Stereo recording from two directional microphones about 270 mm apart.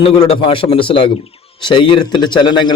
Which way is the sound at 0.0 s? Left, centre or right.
Centre.